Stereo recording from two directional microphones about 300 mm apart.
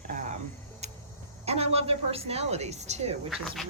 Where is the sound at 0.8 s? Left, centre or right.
Right.